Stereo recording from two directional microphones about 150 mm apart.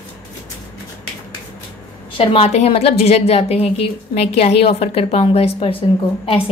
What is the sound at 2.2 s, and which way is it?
A woman's voice, 40° left (ahead or behind).